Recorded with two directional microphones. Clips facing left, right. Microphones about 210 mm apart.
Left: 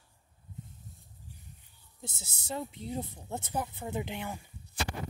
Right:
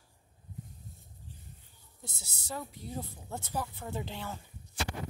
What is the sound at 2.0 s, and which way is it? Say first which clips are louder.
Speech: left 4 dB; 25° left (ahead or behind).